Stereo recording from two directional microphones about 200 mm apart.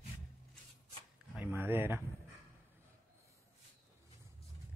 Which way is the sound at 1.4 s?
10° right (ahead or behind).